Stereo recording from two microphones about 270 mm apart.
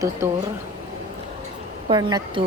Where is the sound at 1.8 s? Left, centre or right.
Centre.